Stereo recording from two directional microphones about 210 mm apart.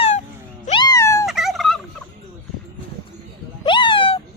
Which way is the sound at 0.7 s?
20° left (ahead or behind).